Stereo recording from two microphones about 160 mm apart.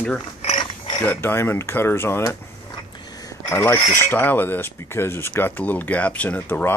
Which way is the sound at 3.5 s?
15° left (ahead or behind).